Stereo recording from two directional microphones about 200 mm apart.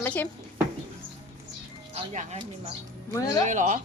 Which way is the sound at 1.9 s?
30° right (ahead or behind).